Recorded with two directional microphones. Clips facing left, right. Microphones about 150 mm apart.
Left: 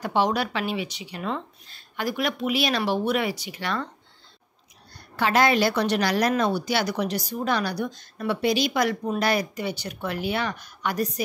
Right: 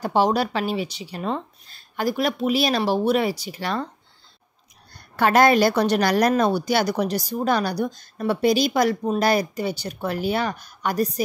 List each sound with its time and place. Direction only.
0.0 s a woman's voice: 35° right (ahead or behind)
5.1 s a woman's voice: 50° right (ahead or behind)